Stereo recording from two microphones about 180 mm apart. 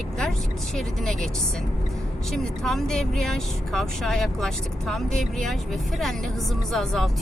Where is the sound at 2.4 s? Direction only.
Centre (ahead or behind).